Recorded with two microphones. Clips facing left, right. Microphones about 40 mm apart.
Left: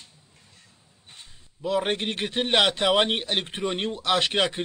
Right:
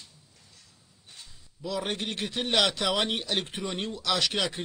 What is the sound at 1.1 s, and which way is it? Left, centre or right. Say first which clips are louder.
A man's voice: left 2 dB; left.